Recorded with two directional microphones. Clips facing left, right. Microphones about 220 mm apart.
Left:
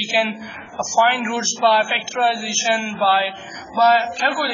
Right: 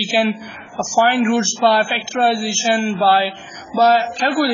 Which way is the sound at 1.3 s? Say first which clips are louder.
Right 4 dB; 45° right (ahead or behind).